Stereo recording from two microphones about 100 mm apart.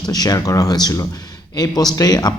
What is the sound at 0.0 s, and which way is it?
Speech, 40° left (ahead or behind).